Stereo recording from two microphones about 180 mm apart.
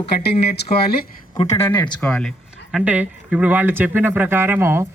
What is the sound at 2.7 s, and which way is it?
A man's voice, 5° right (ahead or behind).